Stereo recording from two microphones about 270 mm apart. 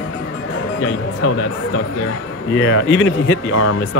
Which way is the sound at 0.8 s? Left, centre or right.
Left.